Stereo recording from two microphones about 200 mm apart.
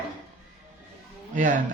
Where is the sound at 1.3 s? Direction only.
40° right (ahead or behind).